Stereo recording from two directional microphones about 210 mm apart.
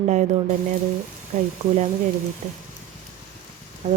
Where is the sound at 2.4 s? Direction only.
30° right (ahead or behind).